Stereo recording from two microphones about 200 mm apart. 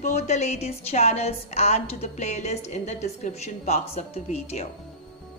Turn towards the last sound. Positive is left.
turn(degrees=30)  # may be behind; listen again after turning